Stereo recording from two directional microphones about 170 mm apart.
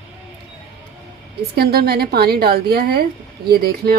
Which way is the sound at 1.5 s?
65° right (ahead or behind).